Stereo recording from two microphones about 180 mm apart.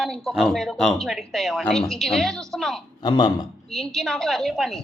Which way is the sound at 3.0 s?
25° left (ahead or behind).